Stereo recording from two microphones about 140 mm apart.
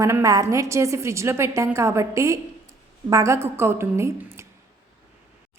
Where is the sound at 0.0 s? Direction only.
20° right (ahead or behind).